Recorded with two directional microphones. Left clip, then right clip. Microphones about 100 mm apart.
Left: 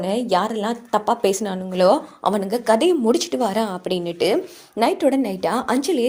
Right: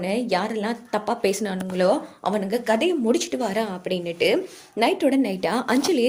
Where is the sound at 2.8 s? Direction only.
90° left.